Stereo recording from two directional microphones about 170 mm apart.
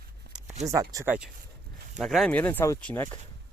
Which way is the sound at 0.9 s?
15° right (ahead or behind).